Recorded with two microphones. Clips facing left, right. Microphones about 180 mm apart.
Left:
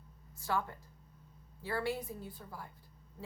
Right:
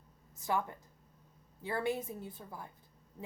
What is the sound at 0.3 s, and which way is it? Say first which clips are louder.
Speech: right 1 dB; 20° right (ahead or behind).